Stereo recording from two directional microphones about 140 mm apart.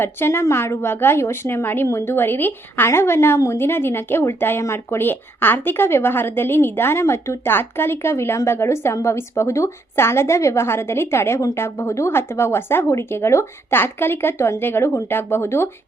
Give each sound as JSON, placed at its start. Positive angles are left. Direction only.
{"t": 0.0, "sound": "a woman's voice", "side_deg": 15}